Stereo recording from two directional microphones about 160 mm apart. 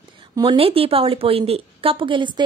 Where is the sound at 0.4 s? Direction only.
35° right (ahead or behind).